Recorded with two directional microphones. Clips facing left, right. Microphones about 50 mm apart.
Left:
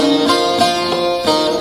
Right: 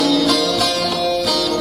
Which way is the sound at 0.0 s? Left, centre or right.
Left.